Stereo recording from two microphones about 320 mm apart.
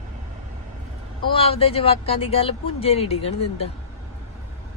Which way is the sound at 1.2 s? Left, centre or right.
Centre.